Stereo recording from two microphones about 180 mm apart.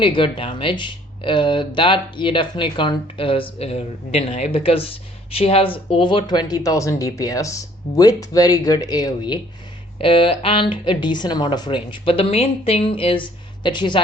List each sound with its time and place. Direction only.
0.0 s speech: 30° left (ahead or behind)